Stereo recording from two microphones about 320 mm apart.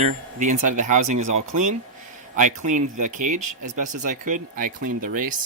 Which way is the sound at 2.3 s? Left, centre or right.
Right.